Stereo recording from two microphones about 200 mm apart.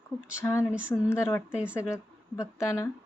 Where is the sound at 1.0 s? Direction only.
15° left (ahead or behind).